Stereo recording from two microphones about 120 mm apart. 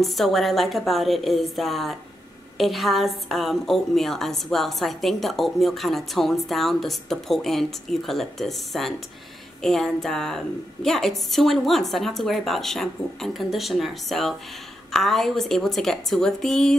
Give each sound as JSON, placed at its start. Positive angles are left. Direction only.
{"t": 0.0, "sound": "a woman's voice", "side_deg": 0}